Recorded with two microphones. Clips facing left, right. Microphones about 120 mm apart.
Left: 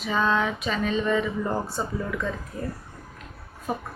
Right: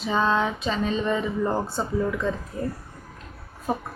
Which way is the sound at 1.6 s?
Centre (ahead or behind).